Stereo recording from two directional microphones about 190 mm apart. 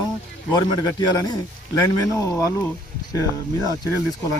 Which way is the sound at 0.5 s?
20° left (ahead or behind).